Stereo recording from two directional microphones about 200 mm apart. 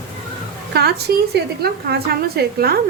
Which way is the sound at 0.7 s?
55° right (ahead or behind).